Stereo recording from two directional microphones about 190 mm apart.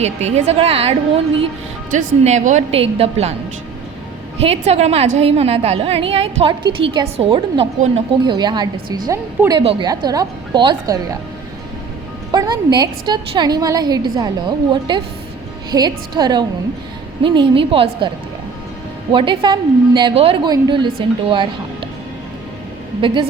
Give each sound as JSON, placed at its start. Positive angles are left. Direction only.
{"t": 0.0, "sound": "a woman's voice", "side_deg": -35}
{"t": 4.4, "sound": "a woman's voice", "side_deg": -30}
{"t": 12.3, "sound": "a woman's voice", "side_deg": -20}
{"t": 19.1, "sound": "a woman's voice", "side_deg": -25}
{"t": 23.0, "sound": "a woman's voice", "side_deg": -25}